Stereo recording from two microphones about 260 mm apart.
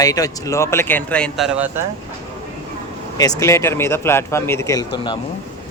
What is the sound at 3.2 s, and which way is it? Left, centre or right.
Speech, centre.